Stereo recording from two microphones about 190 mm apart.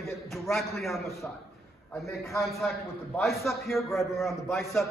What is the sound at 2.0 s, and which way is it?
Speech, 15° left (ahead or behind).